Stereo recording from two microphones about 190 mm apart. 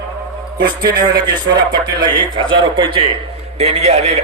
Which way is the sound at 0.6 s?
20° right (ahead or behind).